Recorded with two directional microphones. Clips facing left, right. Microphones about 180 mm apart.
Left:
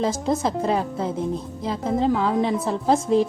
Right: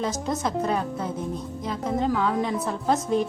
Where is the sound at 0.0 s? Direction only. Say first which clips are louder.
Left 4 dB; 30° left (ahead or behind).